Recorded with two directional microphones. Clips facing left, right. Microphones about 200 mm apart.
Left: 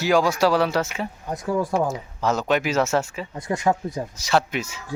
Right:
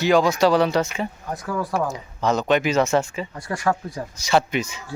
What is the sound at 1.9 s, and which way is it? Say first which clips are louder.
Speech: right 1 dB; 5° left (ahead or behind).